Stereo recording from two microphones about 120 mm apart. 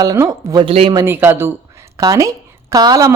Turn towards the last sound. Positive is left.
turn(degrees=-30)  # may be behind; listen again after turning